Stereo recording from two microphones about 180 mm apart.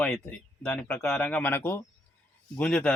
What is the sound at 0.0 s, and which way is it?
Speech, 5° left (ahead or behind).